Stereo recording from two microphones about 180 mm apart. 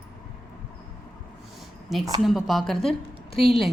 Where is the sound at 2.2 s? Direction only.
Centre (ahead or behind).